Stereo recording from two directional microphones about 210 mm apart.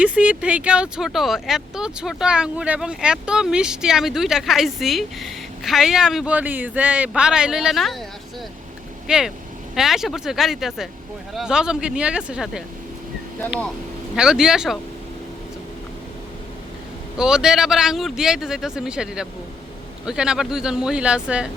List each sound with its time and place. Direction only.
0.0 s speech: 5° right (ahead or behind)
9.0 s speech: 5° right (ahead or behind)
14.2 s speech: 5° right (ahead or behind)
17.2 s speech: 5° right (ahead or behind)